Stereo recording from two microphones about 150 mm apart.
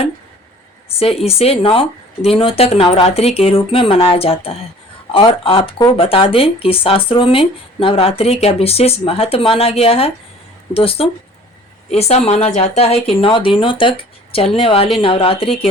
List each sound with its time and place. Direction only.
0.9 s speech: 40° left (ahead or behind)